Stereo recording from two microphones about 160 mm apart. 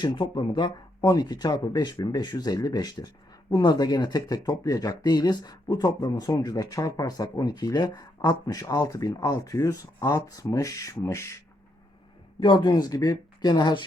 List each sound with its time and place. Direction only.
0.0 s speech: 30° left (ahead or behind)
12.4 s speech: 30° left (ahead or behind)